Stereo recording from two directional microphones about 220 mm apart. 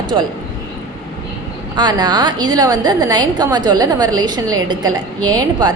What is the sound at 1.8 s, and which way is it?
A woman's voice, 20° right (ahead or behind).